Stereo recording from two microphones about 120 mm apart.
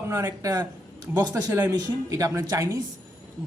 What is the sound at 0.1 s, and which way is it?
A man's voice, 25° right (ahead or behind).